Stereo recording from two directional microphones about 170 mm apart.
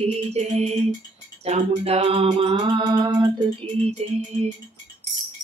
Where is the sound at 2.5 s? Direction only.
25° right (ahead or behind).